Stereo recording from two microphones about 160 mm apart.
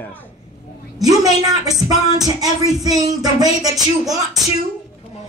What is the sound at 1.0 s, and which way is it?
Speech, 25° right (ahead or behind).